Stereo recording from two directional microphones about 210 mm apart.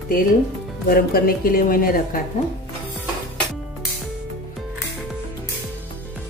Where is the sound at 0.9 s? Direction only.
45° left (ahead or behind).